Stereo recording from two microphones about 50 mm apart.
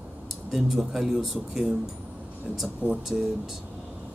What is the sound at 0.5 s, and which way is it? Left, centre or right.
Speech, centre.